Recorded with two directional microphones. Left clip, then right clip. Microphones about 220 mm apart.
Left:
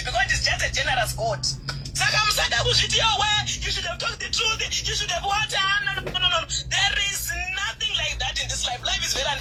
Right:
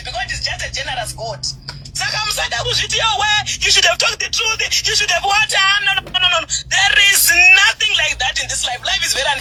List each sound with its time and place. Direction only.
0.2 s music: 20° right (ahead or behind)
2.0 s speech: 20° right (ahead or behind); by 4.3 s 45° right (ahead or behind)
4.4 s speech: 30° right (ahead or behind)